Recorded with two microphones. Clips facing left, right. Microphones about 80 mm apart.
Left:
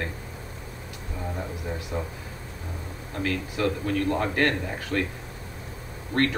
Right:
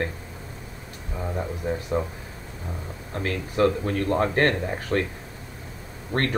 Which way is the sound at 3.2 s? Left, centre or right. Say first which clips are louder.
Right 5 dB; right.